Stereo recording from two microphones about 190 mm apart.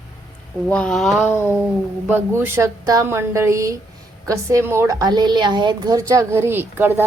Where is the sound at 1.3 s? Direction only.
15° left (ahead or behind).